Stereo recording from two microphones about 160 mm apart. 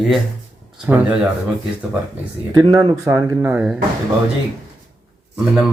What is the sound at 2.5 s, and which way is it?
Speech, 25° right (ahead or behind).